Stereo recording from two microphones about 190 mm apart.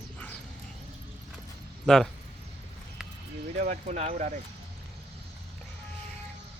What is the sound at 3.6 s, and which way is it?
Speech, 40° right (ahead or behind).